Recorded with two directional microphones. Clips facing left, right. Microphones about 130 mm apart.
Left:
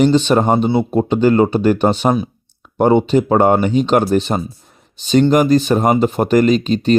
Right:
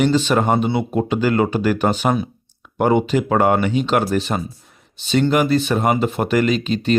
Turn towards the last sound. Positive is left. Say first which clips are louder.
# left 5 dB
turn(degrees=35)  # may be behind; listen again after turning